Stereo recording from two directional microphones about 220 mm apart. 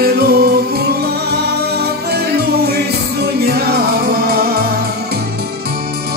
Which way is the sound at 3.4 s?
45° right (ahead or behind).